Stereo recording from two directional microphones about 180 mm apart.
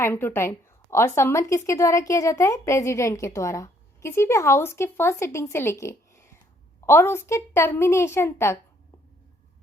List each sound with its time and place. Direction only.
0.0 s a woman's voice: 10° left (ahead or behind)